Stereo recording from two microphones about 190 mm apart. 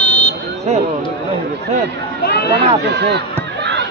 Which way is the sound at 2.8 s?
60° right (ahead or behind).